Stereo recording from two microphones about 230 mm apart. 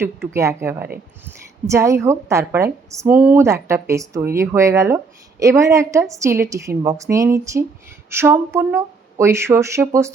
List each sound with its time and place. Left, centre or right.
0.3 s a woman's voice: centre